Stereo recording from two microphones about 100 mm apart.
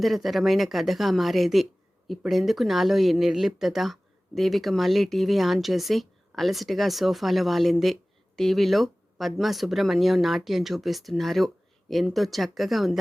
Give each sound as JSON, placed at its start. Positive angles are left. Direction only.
{"t": 0.0, "sound": "speech", "side_deg": 0}